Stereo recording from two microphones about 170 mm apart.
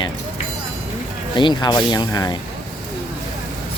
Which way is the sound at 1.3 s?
25° left (ahead or behind).